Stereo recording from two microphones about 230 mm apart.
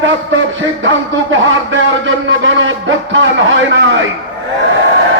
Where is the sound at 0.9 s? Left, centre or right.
Right.